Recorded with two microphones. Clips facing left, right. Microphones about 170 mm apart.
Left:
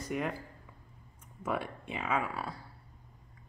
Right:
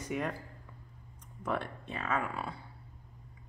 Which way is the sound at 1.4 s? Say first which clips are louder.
Even; 5° left (ahead or behind).